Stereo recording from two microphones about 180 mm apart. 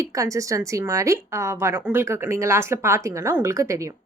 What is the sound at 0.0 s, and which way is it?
A woman's voice, 15° right (ahead or behind).